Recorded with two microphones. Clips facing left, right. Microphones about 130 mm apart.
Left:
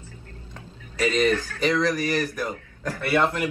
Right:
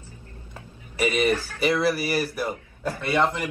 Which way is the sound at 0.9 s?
15° right (ahead or behind).